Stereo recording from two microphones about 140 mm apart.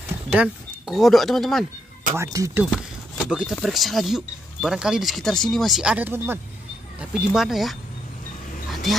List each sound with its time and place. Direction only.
0.3 s speech: 5° right (ahead or behind)
2.1 s speech: 25° right (ahead or behind)
2.7 s a sound: 5° right (ahead or behind)
3.5 s speech: centre (ahead or behind); by 6.4 s 15° right (ahead or behind)
7.0 s speech: 5° right (ahead or behind)
8.9 s speech: centre (ahead or behind)